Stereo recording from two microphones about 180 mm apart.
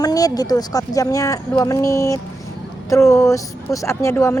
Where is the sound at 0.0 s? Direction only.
20° left (ahead or behind).